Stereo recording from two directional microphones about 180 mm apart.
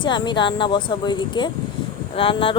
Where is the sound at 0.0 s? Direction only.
25° left (ahead or behind).